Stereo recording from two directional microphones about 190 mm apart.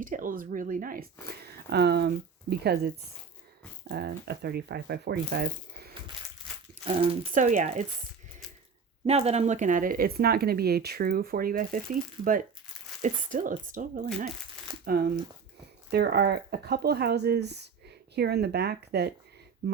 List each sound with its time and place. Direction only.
0.0 s speech: 45° right (ahead or behind)
1.7 s speech: 60° right (ahead or behind)
6.8 s speech: 30° right (ahead or behind)
7.3 s speech: 40° right (ahead or behind)
9.0 s speech: 35° right (ahead or behind); by 11.8 s 50° right (ahead or behind)
13.0 s speech: 45° right (ahead or behind); by 19.1 s 60° right (ahead or behind)